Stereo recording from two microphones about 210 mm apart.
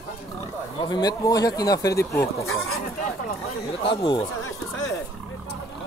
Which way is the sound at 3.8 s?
20° left (ahead or behind).